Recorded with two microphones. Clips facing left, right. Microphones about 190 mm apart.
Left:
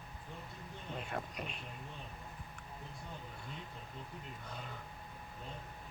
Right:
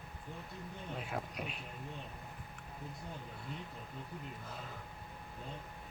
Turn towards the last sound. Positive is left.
turn(degrees=0)  # may be behind; listen again after turning